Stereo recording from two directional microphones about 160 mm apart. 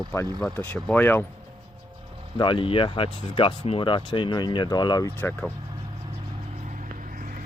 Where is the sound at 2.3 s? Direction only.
30° left (ahead or behind).